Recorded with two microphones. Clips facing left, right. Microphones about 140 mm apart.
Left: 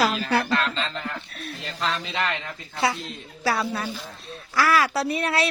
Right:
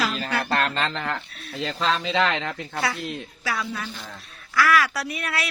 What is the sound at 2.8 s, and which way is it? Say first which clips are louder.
Speech: left 3 dB; 25° left (ahead or behind).